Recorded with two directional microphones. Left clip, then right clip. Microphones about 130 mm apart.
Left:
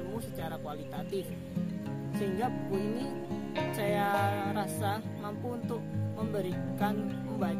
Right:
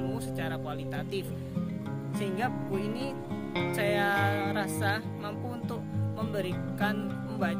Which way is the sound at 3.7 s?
40° right (ahead or behind).